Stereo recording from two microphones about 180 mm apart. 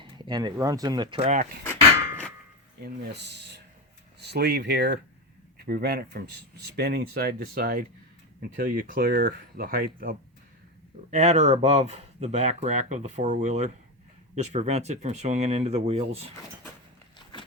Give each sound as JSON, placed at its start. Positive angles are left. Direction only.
{"t": 0.0, "sound": "speech", "side_deg": -25}
{"t": 2.8, "sound": "speech", "side_deg": -70}
{"t": 11.1, "sound": "speech", "side_deg": -40}